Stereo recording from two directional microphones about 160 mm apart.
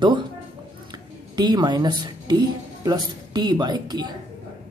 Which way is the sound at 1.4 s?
25° right (ahead or behind).